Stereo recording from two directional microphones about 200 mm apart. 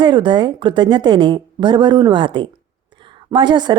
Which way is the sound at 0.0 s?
25° right (ahead or behind).